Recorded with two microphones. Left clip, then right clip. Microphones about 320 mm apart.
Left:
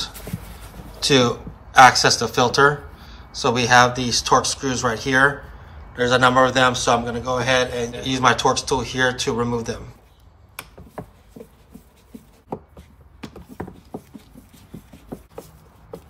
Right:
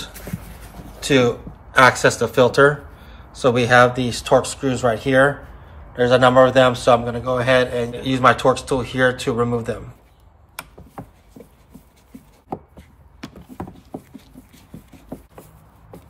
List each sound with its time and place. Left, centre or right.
0.9 s a man's voice: centre